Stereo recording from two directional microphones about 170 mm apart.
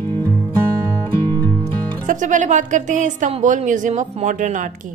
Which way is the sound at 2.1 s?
50° right (ahead or behind).